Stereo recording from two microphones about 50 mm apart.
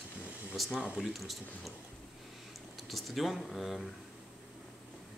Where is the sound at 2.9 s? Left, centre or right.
Centre.